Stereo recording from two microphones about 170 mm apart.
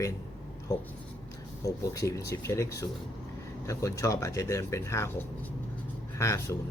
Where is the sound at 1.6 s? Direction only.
20° left (ahead or behind).